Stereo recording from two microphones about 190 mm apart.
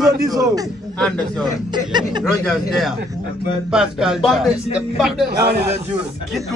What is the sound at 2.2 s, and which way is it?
Speech, centre (ahead or behind).